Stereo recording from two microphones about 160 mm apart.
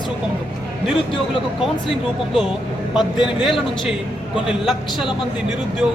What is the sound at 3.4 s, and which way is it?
A man's voice, 5° right (ahead or behind).